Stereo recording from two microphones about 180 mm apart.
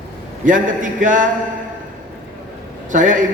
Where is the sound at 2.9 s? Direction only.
45° right (ahead or behind).